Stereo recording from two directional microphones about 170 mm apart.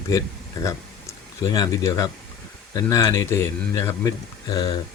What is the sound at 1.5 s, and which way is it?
Speech, 20° left (ahead or behind).